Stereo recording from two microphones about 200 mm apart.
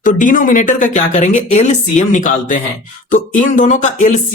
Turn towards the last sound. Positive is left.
turn(degrees=35)  # may be behind; listen again after turning